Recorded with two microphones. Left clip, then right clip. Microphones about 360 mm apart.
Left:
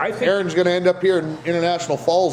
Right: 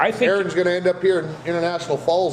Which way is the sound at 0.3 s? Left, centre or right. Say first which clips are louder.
Left 1 dB; left.